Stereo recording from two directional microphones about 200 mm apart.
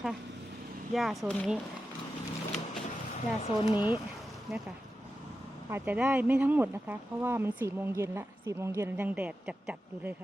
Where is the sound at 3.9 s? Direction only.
Centre (ahead or behind).